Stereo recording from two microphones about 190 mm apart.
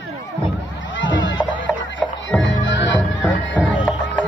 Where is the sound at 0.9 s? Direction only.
75° left (ahead or behind).